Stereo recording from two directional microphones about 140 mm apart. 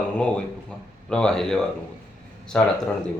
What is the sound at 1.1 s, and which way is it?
Speech, 5° left (ahead or behind).